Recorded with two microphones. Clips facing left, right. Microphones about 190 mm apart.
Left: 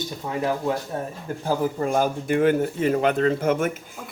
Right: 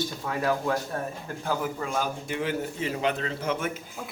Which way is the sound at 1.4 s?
35° left (ahead or behind).